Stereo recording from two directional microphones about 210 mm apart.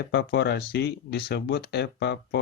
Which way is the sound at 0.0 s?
50° left (ahead or behind).